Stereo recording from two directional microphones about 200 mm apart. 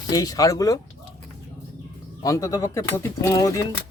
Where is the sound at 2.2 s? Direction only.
15° left (ahead or behind).